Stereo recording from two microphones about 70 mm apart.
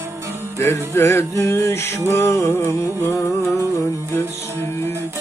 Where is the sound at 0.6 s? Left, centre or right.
Left.